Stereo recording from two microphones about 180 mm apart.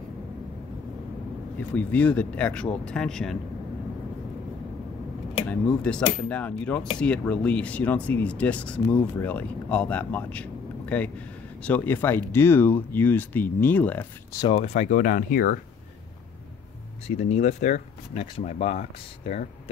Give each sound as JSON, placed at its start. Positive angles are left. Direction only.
{"t": 1.6, "sound": "speech", "side_deg": 10}
{"t": 5.5, "sound": "speech", "side_deg": 5}
{"t": 14.6, "sound": "speech", "side_deg": 40}
{"t": 17.2, "sound": "speech", "side_deg": 40}